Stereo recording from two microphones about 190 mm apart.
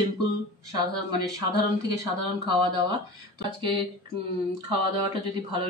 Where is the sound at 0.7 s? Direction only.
20° right (ahead or behind).